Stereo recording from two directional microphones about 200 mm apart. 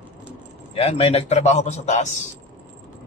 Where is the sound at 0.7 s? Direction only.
30° left (ahead or behind).